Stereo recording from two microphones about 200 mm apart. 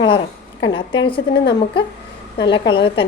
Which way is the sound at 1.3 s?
60° left (ahead or behind).